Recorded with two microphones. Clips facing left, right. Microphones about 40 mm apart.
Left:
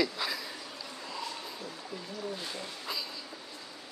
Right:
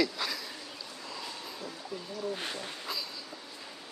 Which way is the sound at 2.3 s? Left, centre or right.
Right.